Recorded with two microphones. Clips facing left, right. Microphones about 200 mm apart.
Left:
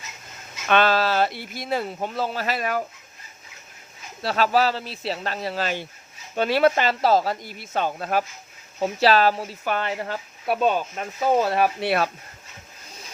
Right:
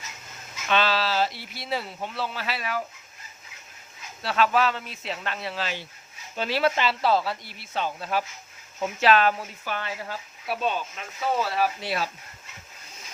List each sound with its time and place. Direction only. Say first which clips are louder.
0.7 s speech: left 5 dB; 50° left (ahead or behind)
4.2 s speech: left 2 dB; 40° left (ahead or behind)
8.8 s speech: left 2 dB; 35° left (ahead or behind)
9.6 s speech: left 7 dB; 55° left (ahead or behind)